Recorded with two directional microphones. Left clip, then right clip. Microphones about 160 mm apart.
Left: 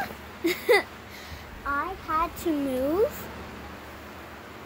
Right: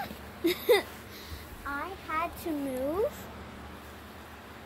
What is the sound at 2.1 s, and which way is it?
Speech, 15° left (ahead or behind).